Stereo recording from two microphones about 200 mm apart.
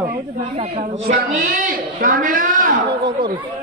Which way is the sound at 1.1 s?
45° right (ahead or behind).